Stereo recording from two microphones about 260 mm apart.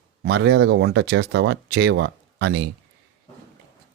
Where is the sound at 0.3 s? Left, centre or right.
Right.